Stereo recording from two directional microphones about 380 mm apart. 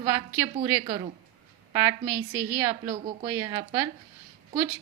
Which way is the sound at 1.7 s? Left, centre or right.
Centre.